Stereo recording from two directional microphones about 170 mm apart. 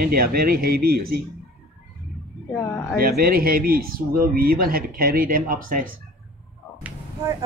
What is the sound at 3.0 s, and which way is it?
Speech, 60° right (ahead or behind).